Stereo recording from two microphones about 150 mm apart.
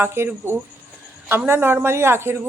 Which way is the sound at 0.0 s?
15° right (ahead or behind).